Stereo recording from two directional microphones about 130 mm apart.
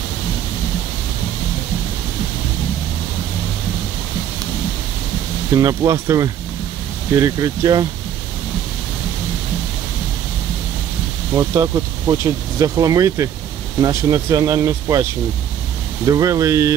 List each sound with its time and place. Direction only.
5.5 s speech: 25° right (ahead or behind)
11.3 s speech: 25° right (ahead or behind)
16.1 s speech: 25° right (ahead or behind)